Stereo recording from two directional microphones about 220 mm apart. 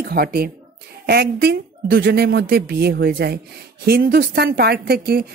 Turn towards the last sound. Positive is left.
turn(degrees=-45)  # may be behind; listen again after turning